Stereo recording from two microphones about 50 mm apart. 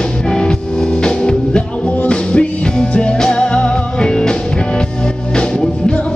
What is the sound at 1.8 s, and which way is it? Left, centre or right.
Music, left.